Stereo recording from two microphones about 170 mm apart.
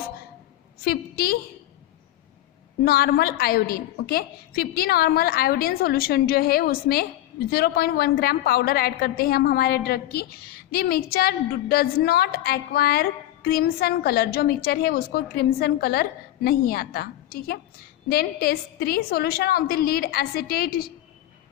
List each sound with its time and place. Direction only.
0.8 s a woman's voice: 65° left (ahead or behind)
2.8 s a woman's voice: 65° left (ahead or behind)